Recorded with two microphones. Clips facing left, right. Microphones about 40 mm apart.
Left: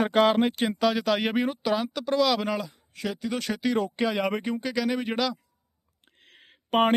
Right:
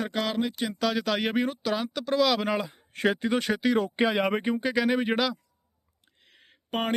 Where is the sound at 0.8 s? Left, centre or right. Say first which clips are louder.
Left 2 dB; centre.